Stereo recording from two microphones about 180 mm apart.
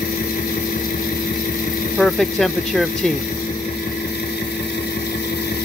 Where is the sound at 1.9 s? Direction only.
Centre (ahead or behind).